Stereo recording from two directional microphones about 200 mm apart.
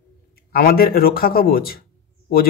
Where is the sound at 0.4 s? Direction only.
45° left (ahead or behind).